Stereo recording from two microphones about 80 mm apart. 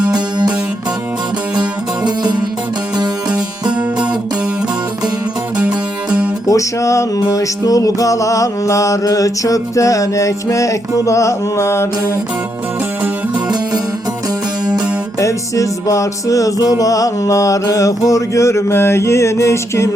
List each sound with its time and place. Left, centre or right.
0.1 s music: right
2.0 s music: right
5.5 s music: centre
6.5 s music: left
13.3 s music: right
15.2 s music: left